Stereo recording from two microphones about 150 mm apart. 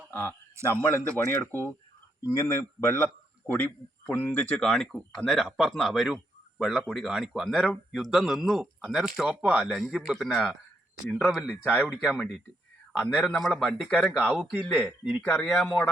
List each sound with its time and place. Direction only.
0.1 s a man's voice: 15° left (ahead or behind)